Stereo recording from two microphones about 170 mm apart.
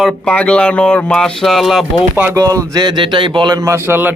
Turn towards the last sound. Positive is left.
turn(degrees=-10)  # may be behind; listen again after turning